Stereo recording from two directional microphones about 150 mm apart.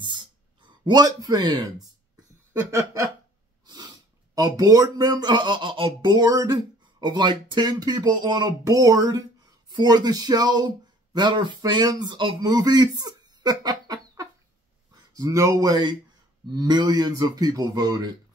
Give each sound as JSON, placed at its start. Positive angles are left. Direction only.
{"t": 0.0, "sound": "a sound", "side_deg": -30}
{"t": 2.7, "sound": "speech", "side_deg": -20}
{"t": 3.6, "sound": "snort", "side_deg": -30}
{"t": 4.4, "sound": "speech", "side_deg": -25}